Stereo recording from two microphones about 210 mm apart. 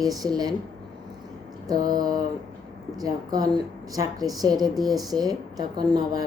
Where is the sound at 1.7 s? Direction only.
20° right (ahead or behind).